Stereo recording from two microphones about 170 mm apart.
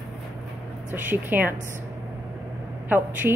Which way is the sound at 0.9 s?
10° right (ahead or behind).